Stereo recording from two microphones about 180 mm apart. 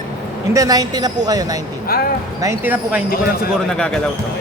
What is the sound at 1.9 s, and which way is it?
Speech, 55° left (ahead or behind).